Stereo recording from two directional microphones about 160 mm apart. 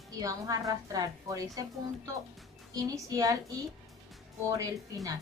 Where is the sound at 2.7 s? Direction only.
25° right (ahead or behind).